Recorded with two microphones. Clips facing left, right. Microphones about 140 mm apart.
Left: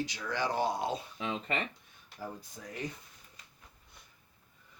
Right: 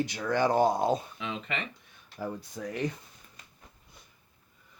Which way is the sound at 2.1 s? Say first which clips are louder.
Right 7 dB; 90° right.